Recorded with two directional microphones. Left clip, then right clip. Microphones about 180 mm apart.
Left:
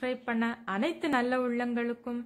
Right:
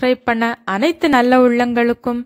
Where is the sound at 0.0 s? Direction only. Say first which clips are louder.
Right 16 dB; 50° right (ahead or behind).